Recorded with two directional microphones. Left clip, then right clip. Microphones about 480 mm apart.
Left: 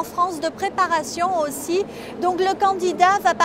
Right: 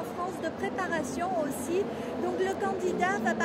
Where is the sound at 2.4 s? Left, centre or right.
Left.